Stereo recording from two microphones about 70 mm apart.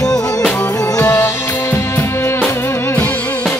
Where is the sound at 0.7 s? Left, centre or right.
Left.